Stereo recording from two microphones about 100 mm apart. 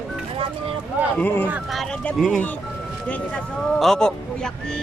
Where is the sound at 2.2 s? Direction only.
Centre (ahead or behind).